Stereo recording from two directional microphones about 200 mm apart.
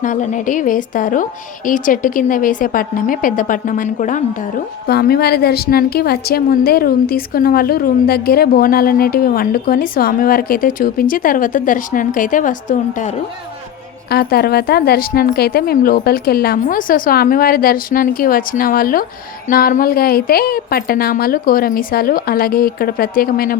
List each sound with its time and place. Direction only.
0.0 s a woman's voice: 40° left (ahead or behind)
14.1 s a woman's voice: 50° left (ahead or behind)